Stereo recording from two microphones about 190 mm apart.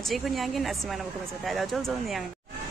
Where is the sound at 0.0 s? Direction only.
Centre (ahead or behind).